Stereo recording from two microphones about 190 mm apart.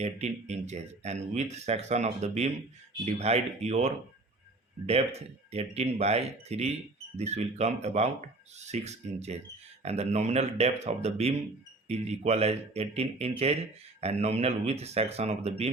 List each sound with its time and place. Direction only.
0.0 s speech: 35° right (ahead or behind)
5.5 s speech: 35° right (ahead or behind)